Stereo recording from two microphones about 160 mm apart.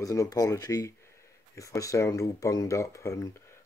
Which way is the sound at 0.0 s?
20° left (ahead or behind).